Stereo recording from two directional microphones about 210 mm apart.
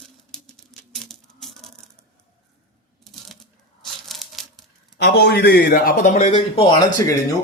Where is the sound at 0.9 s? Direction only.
Centre (ahead or behind).